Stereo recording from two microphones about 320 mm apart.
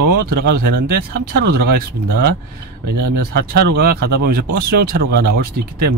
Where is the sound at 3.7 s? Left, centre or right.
Right.